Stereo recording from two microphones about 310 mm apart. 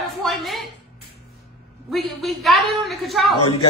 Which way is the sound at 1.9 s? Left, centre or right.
Centre.